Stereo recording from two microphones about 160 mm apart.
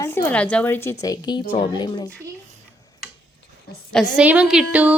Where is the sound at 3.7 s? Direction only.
75° left (ahead or behind).